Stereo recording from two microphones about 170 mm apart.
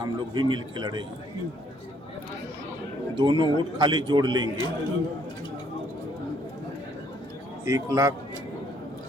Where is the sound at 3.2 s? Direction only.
25° right (ahead or behind).